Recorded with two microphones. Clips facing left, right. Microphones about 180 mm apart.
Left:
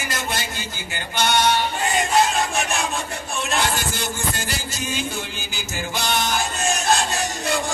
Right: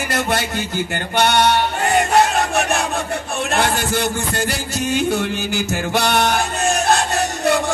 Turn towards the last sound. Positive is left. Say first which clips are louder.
# right 7 dB
turn(degrees=-60)  # may be behind; listen again after turning